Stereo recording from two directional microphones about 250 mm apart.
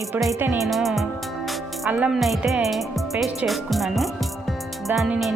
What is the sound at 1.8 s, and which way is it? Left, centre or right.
Speech, centre.